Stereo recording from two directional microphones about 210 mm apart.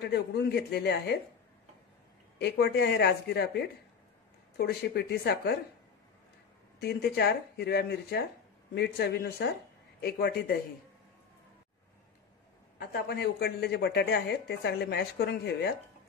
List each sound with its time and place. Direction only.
0.0 s speech: 50° left (ahead or behind)
2.3 s speech: 50° left (ahead or behind)
6.8 s speech: 50° left (ahead or behind)
12.7 s speech: 45° left (ahead or behind)